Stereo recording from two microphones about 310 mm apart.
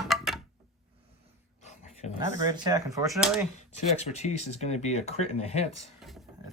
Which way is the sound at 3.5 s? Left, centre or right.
Left.